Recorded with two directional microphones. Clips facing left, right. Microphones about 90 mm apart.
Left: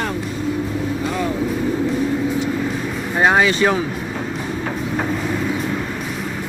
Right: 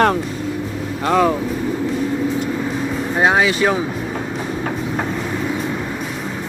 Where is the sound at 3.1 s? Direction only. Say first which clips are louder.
Left 1 dB; 5° right (ahead or behind).